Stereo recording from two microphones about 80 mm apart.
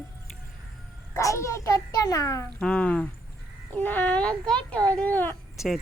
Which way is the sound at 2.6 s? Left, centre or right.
Centre.